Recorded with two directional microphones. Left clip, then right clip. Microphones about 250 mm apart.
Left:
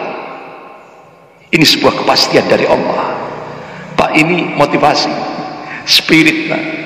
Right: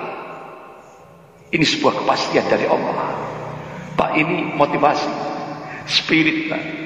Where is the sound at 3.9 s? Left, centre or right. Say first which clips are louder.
Left 7 dB; left.